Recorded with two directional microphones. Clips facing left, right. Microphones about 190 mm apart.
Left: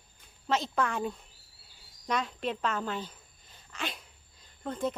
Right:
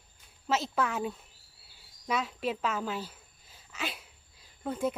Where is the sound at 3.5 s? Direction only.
5° right (ahead or behind).